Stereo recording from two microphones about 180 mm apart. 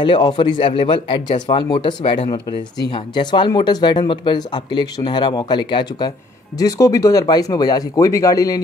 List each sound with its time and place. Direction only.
0.0 s speech: 25° left (ahead or behind)